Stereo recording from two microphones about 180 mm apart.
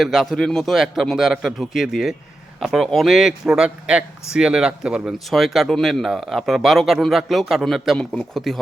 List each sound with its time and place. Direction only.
0.0 s a man's voice: centre (ahead or behind)